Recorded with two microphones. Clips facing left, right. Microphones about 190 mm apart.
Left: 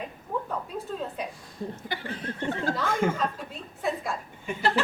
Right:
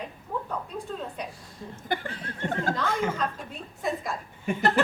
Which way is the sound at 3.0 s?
50° left (ahead or behind).